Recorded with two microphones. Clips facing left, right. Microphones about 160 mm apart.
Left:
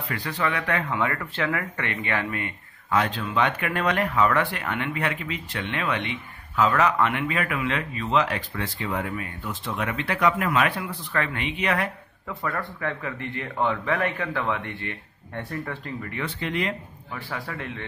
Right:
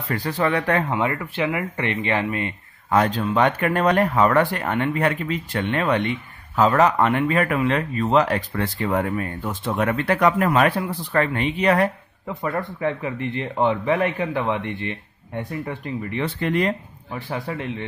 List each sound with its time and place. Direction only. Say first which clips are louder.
0.1 s speech: right 6 dB; 40° right (ahead or behind)
0.9 s a man's voice: right 3 dB; 15° right (ahead or behind)
2.9 s speech: right 5 dB; 40° right (ahead or behind)
12.3 s a man's voice: right 4 dB; 25° right (ahead or behind)
16.3 s speech: right 6 dB; 45° right (ahead or behind)
17.1 s a man's voice: right 5 dB; 25° right (ahead or behind)